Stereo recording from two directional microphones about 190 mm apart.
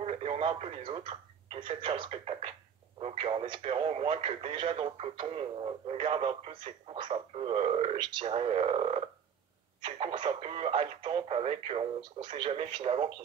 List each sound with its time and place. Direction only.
0.0 s speech: 30° right (ahead or behind)